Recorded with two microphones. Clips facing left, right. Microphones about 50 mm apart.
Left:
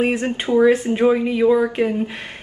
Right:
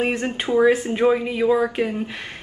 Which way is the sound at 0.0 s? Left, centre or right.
Centre.